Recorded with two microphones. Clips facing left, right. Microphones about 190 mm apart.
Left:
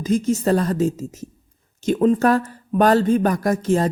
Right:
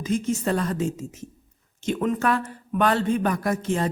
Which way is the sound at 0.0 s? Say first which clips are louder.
Left 5 dB; 40° left (ahead or behind).